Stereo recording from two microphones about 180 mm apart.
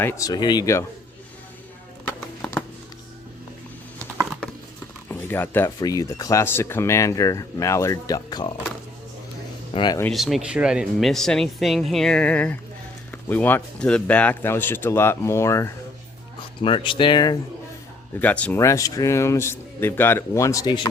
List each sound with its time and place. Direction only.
0.0 s speech: 15° left (ahead or behind)
2.0 s music: 10° left (ahead or behind)
5.0 s speech: 10° left (ahead or behind)
9.7 s speech: 25° left (ahead or behind)
10.0 s speech: centre (ahead or behind)
16.6 s speech: 30° left (ahead or behind)
18.2 s speech: 10° left (ahead or behind)